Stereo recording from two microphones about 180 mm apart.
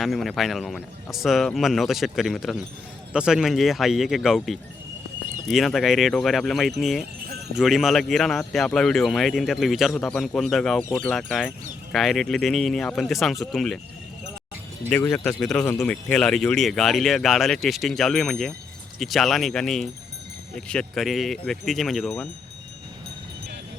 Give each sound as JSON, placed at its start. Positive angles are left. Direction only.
{"t": 0.0, "sound": "a man's voice", "side_deg": 0}
{"t": 14.8, "sound": "a man's voice", "side_deg": 10}